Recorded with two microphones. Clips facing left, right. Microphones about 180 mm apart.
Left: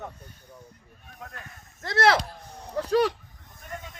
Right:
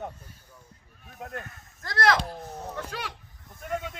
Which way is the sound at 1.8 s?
25° left (ahead or behind).